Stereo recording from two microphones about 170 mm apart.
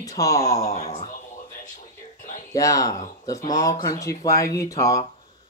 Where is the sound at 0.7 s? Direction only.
40° left (ahead or behind).